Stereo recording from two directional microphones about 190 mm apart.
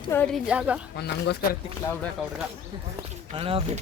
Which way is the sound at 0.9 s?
60° left (ahead or behind).